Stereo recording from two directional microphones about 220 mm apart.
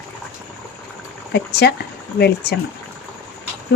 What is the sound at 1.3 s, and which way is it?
Speech, 50° left (ahead or behind).